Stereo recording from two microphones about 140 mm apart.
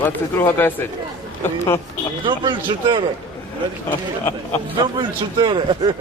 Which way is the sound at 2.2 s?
35° right (ahead or behind).